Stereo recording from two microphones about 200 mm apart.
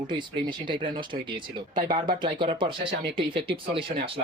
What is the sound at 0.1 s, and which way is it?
Speech, 25° right (ahead or behind).